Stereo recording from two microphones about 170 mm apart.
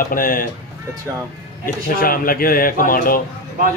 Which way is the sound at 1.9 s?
60° left (ahead or behind).